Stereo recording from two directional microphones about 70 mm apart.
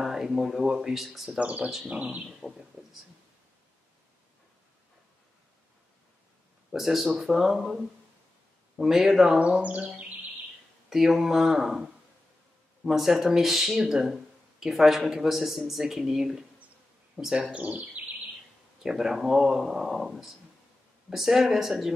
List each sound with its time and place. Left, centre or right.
0.0 s speech: centre
1.4 s speech: centre
2.2 s a sound: centre
6.7 s speech: centre
9.4 s speech: centre
10.9 s speech: centre; by 18.0 s right
18.8 s speech: centre